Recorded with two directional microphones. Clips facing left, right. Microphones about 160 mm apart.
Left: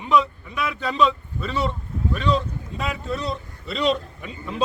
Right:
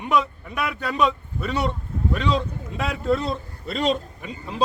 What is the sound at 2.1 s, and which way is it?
Speech, 85° right.